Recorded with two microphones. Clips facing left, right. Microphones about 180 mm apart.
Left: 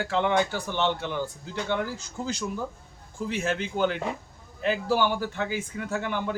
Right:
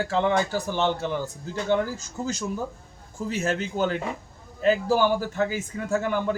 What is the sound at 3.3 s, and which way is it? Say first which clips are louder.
A man's voice: right 2 dB; 45° right (ahead or behind).